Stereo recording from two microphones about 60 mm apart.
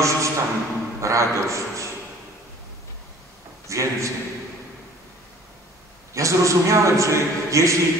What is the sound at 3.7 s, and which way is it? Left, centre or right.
Speech, right.